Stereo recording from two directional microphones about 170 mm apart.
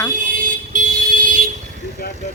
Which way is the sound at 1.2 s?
55° right (ahead or behind).